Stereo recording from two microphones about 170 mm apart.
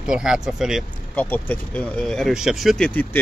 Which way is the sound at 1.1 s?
10° left (ahead or behind).